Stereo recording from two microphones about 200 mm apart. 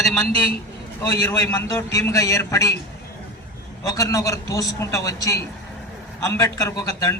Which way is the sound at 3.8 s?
15° left (ahead or behind).